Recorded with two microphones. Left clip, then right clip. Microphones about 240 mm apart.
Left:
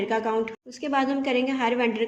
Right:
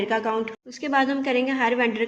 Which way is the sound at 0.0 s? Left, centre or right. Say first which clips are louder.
Right 1 dB; centre.